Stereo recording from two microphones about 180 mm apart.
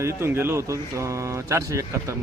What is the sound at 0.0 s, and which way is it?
Speech, 15° right (ahead or behind).